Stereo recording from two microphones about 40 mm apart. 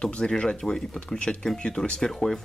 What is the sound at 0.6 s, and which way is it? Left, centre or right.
Speech, centre.